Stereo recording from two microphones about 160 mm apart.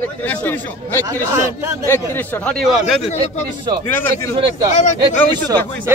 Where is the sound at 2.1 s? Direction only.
10° left (ahead or behind).